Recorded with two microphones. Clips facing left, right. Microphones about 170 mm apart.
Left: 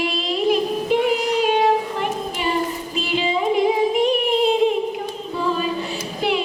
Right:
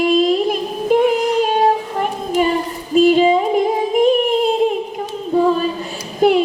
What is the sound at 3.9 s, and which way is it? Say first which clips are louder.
Singing: right 5 dB; 45° right (ahead or behind).